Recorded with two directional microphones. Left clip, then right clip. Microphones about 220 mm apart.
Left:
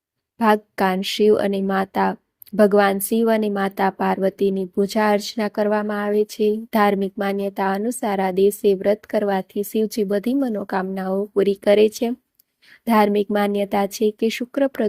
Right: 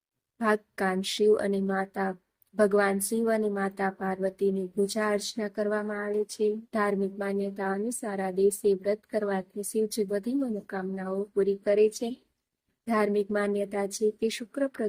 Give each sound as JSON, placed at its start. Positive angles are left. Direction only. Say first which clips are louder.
{"t": 0.3, "sound": "speech", "louder": "left 9 dB", "side_deg": 30}